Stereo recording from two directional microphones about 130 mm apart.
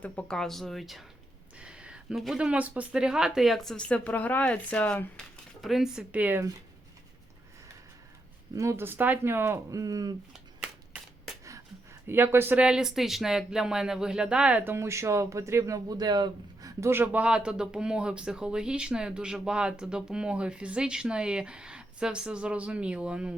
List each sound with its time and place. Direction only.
0.0 s speech: 10° left (ahead or behind)
5.6 s speech: centre (ahead or behind)
8.5 s speech: 20° right (ahead or behind)
10.3 s shuffling cards: 5° right (ahead or behind)
12.0 s speech: 20° right (ahead or behind)